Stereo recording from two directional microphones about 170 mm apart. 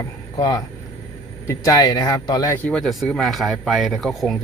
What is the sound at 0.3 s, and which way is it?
Speech, 25° left (ahead or behind).